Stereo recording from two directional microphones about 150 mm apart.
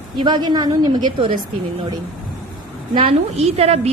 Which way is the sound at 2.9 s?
40° right (ahead or behind).